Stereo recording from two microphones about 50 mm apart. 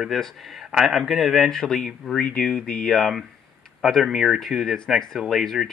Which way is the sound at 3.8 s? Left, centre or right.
Centre.